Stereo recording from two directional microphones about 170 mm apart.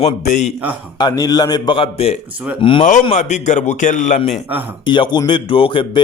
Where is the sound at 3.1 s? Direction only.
45° left (ahead or behind).